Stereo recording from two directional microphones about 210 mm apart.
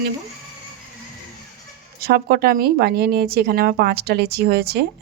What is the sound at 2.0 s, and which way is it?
Speech, 45° right (ahead or behind).